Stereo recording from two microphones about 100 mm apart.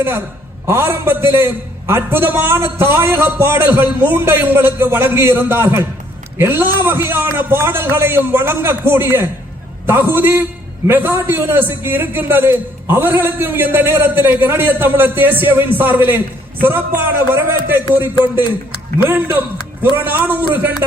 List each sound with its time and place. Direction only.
0.7 s a man's voice: 25° right (ahead or behind)